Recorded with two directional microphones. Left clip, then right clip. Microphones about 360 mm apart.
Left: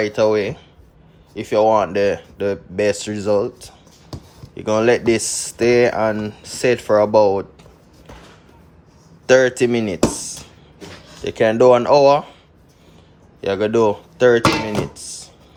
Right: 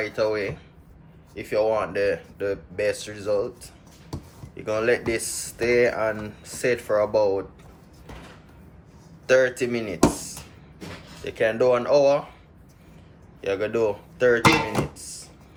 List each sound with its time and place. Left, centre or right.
0.0 s speech: centre
9.2 s speech: centre
11.2 s speech: left
13.4 s speech: left
15.0 s a sound: left